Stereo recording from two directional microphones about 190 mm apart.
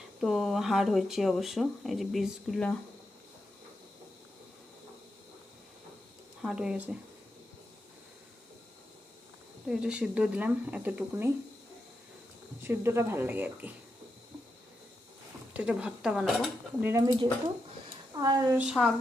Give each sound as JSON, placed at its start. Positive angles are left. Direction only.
{"t": 0.2, "sound": "speech", "side_deg": 0}
{"t": 6.4, "sound": "speech", "side_deg": -5}
{"t": 9.6, "sound": "speech", "side_deg": -5}
{"t": 12.6, "sound": "speech", "side_deg": -10}
{"t": 15.5, "sound": "speech", "side_deg": -5}
{"t": 16.8, "sound": "speech", "side_deg": -15}
{"t": 17.8, "sound": "a sound", "side_deg": -20}
{"t": 18.5, "sound": "speech", "side_deg": -5}